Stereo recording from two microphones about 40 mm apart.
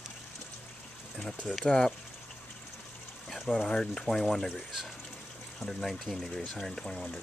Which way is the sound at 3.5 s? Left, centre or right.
Centre.